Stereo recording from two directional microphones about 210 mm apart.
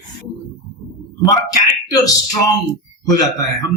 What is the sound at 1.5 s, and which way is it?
Speech, 15° left (ahead or behind).